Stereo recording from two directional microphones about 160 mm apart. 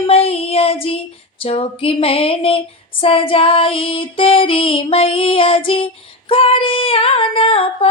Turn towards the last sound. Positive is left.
turn(degrees=35)  # may be behind; listen again after turning